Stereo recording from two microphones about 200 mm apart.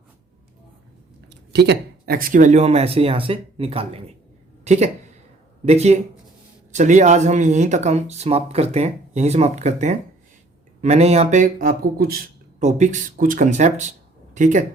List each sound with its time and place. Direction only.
1.3 s speech: 55° right (ahead or behind)
12.6 s speech: 35° right (ahead or behind)